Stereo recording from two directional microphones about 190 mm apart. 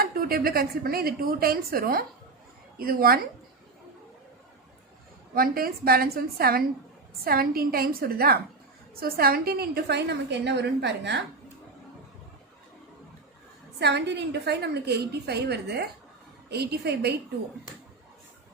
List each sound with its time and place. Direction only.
0.0 s a woman's voice: 50° right (ahead or behind)
5.3 s a woman's voice: 50° right (ahead or behind)
13.7 s a woman's voice: 60° right (ahead or behind)